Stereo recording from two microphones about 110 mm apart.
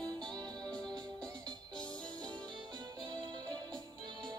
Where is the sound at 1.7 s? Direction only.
10° left (ahead or behind).